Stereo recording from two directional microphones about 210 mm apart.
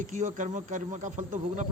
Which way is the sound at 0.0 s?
35° right (ahead or behind).